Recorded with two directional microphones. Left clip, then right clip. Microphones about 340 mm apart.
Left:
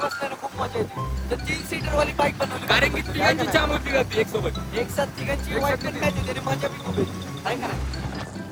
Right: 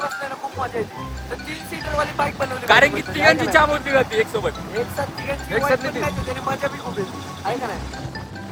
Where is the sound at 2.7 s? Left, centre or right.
Centre.